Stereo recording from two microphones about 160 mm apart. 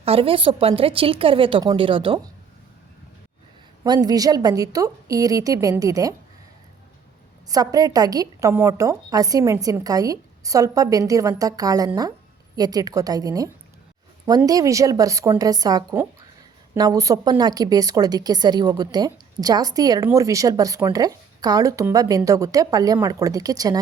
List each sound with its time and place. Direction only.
0.0 s a woman's voice: 35° right (ahead or behind)
3.8 s a woman's voice: 25° right (ahead or behind)
7.4 s a woman's voice: 20° right (ahead or behind)